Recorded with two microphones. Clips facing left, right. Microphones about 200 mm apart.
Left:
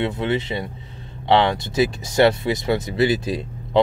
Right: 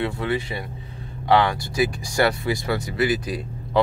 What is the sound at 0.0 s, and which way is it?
Speech, 20° left (ahead or behind).